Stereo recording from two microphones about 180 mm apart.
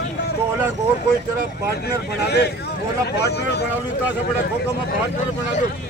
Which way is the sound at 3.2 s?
65° left (ahead or behind).